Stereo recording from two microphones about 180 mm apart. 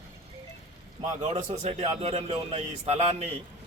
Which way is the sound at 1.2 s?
40° right (ahead or behind).